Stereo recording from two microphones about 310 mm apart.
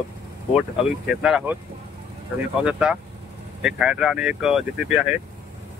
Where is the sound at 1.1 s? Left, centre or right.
Centre.